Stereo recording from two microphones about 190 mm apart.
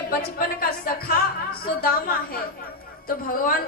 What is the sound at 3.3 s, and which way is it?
Speech, 50° left (ahead or behind).